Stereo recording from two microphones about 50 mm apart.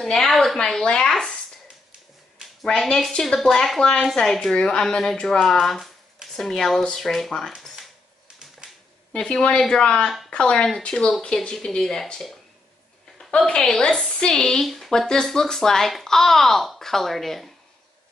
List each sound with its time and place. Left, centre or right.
0.0 s a woman's voice: centre
2.8 s a woman's voice: centre
9.1 s speech: centre
13.5 s speech: centre